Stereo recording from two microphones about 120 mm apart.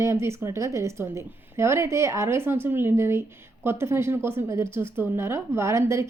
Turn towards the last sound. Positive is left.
turn(degrees=-25)  # may be behind; listen again after turning